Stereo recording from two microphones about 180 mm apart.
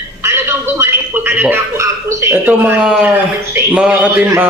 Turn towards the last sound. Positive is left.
turn(degrees=-10)  # may be behind; listen again after turning